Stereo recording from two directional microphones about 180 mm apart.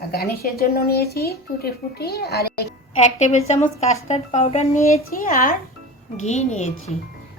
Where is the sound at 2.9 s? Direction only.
40° left (ahead or behind).